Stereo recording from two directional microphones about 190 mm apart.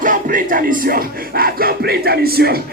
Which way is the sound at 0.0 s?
45° right (ahead or behind).